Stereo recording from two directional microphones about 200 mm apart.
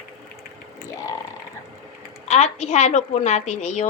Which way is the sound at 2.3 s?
35° left (ahead or behind).